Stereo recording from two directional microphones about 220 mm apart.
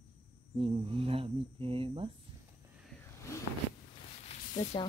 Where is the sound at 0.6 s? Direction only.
25° right (ahead or behind).